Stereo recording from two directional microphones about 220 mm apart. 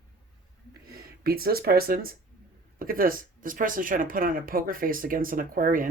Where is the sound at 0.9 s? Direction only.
45° right (ahead or behind).